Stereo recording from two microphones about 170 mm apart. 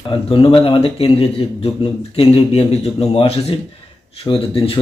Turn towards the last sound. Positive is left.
turn(degrees=35)  # may be behind; listen again after turning